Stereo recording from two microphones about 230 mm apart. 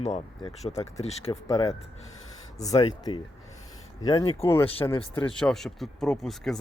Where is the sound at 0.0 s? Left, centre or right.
Left.